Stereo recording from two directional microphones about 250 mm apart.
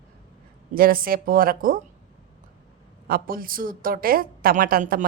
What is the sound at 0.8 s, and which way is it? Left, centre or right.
Speech, right.